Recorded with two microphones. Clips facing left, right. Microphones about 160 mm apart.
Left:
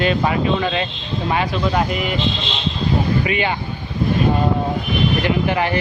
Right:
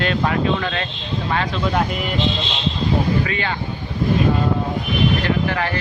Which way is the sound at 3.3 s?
15° left (ahead or behind).